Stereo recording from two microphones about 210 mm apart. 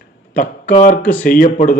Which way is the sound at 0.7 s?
35° left (ahead or behind).